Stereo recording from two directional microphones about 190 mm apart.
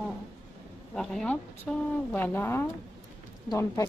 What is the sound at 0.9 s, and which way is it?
A woman's voice, 5° left (ahead or behind).